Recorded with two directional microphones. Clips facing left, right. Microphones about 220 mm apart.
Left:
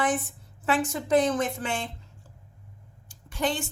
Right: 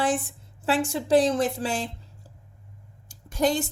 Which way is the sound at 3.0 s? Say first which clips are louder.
Right 5 dB; 40° right (ahead or behind).